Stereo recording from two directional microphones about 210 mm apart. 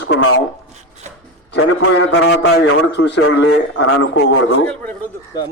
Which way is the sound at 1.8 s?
90° left.